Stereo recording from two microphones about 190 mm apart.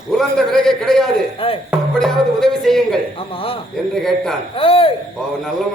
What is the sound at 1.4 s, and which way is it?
Speech, 30° left (ahead or behind).